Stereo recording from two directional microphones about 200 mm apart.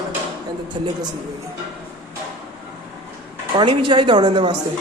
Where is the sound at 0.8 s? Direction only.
25° right (ahead or behind).